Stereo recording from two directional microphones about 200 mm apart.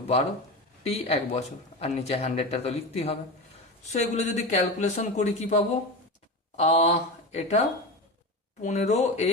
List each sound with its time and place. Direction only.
0.9 s speech: 30° left (ahead or behind)
8.6 s speech: 35° left (ahead or behind)